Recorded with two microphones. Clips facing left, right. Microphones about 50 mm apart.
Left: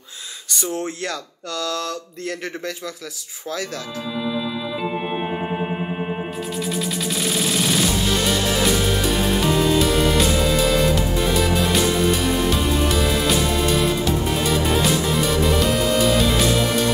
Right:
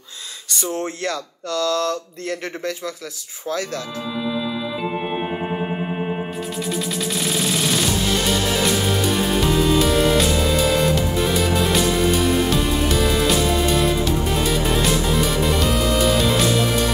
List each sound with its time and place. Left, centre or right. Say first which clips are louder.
1.6 s mantra: right 5 dB; left
1.9 s speech: right 3 dB; right
7.0 s music: even; centre